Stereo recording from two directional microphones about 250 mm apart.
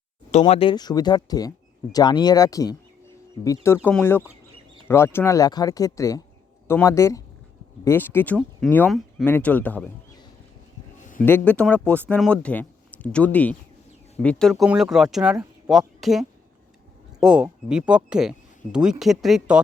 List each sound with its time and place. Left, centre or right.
0.3 s speech: left; by 9.9 s centre
11.0 s a sound: left
11.3 s speech: centre